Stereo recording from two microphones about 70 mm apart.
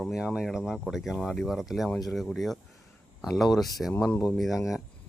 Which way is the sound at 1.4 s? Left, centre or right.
Centre.